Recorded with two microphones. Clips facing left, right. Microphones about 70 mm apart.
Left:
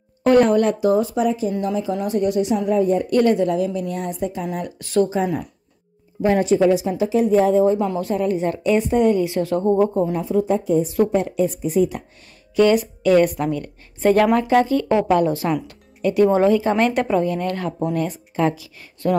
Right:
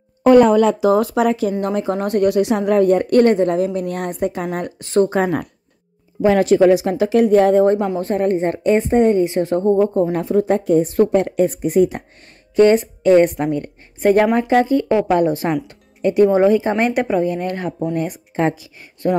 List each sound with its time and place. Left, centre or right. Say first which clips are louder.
0.7 s a woman's voice: right 3 dB; right
1.6 s a woman's voice: right 3 dB; right
2.0 s a woman's voice: right 4 dB; right
4.7 s a woman's voice: right 3 dB; right
5.1 s a woman's voice: right 3 dB; right
8.0 s a woman's voice: right 3 dB; right
10.1 s a woman's voice: right 3 dB; right
12.5 s a woman's voice: right 3 dB; right